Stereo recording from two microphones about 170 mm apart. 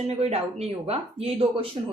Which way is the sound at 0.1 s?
35° right (ahead or behind).